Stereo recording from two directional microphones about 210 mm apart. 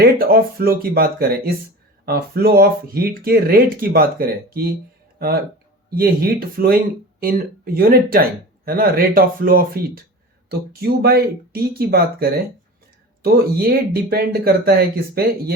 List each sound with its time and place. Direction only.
0.0 s speech: 45° right (ahead or behind)
5.9 s speech: 45° right (ahead or behind)